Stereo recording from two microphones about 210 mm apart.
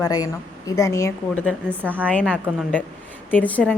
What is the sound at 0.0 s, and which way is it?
A woman's voice, 15° left (ahead or behind).